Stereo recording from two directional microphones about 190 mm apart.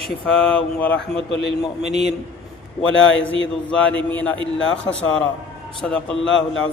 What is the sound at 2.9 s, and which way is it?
Speech, 80° left.